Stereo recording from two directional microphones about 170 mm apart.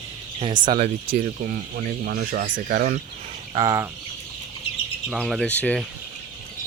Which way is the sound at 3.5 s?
20° right (ahead or behind).